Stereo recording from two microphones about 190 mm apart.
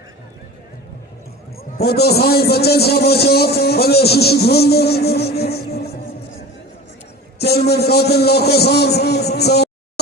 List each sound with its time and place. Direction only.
1.8 s a man's voice: 55° left (ahead or behind)
7.3 s a man's voice: 55° left (ahead or behind)